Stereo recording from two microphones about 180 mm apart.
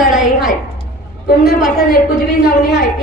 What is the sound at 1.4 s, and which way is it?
Speech, 55° left (ahead or behind).